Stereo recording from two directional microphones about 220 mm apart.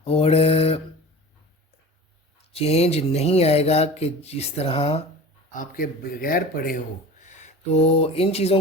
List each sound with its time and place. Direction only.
0.0 s speech: 25° left (ahead or behind)
2.5 s speech: 25° left (ahead or behind)
5.5 s speech: 40° left (ahead or behind)